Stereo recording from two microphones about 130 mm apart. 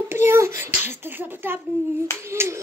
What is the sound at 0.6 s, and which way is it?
A child's voice, 15° right (ahead or behind).